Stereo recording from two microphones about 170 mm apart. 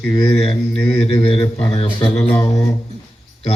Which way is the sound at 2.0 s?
10° left (ahead or behind).